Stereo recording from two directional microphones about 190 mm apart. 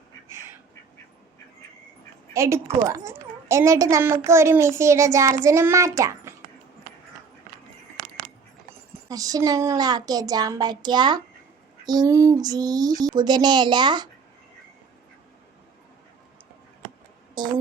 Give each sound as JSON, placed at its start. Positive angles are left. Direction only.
{"t": 0.3, "sound": "a sound", "side_deg": -15}
{"t": 2.3, "sound": "speech", "side_deg": -15}
{"t": 9.0, "sound": "speech", "side_deg": -20}
{"t": 17.4, "sound": "speech", "side_deg": -25}